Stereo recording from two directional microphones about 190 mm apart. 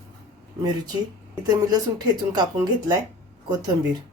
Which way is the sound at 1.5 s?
20° right (ahead or behind).